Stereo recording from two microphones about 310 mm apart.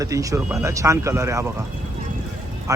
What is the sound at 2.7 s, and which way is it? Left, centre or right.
Speech, centre.